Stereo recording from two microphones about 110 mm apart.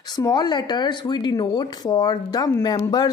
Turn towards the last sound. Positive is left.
turn(degrees=40)  # may be behind; listen again after turning